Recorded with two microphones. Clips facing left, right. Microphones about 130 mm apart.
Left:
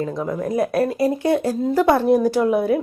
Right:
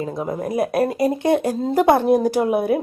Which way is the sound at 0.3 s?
30° right (ahead or behind).